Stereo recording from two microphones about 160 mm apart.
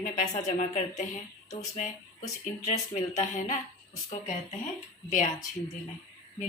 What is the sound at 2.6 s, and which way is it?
Speech, 50° left (ahead or behind).